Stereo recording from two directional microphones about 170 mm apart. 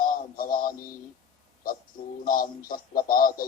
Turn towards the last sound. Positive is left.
turn(degrees=55)  # may be behind; listen again after turning